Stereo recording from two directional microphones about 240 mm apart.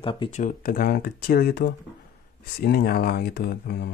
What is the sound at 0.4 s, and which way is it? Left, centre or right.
Speech, left.